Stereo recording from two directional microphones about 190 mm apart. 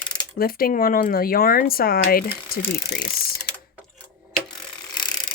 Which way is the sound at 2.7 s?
60° left (ahead or behind).